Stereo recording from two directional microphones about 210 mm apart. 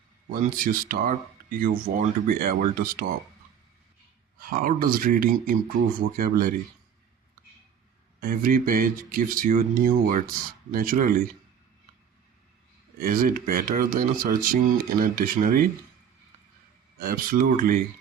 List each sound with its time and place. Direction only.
0.3 s speech: 40° right (ahead or behind)
4.4 s speech: 45° right (ahead or behind)
8.2 s speech: 40° right (ahead or behind)
13.0 s speech: 45° right (ahead or behind)
17.0 s speech: 45° right (ahead or behind)